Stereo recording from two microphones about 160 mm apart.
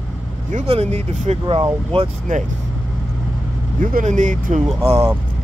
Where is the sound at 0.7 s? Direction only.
40° right (ahead or behind).